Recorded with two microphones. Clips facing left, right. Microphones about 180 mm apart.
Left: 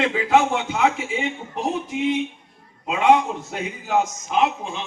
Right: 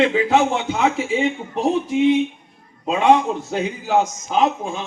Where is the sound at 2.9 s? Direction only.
30° right (ahead or behind).